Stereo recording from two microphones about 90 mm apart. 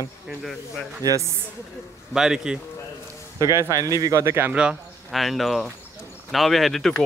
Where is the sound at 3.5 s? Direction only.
35° right (ahead or behind).